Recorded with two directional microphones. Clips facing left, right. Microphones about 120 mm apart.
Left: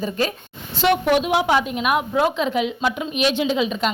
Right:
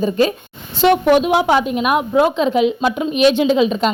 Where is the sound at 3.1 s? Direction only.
35° right (ahead or behind).